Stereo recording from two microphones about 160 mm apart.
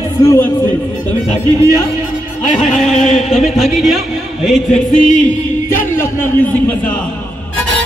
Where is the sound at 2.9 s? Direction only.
45° left (ahead or behind).